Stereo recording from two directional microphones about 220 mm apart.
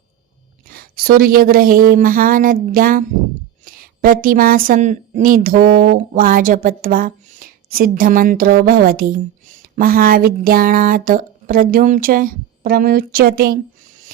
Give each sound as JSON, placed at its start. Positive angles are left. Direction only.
{"t": 0.7, "sound": "speech", "side_deg": -40}